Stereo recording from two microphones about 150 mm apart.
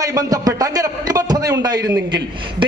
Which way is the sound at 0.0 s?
25° right (ahead or behind).